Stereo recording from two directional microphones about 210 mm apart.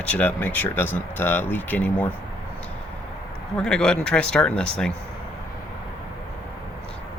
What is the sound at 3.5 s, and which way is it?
Speech, 5° left (ahead or behind).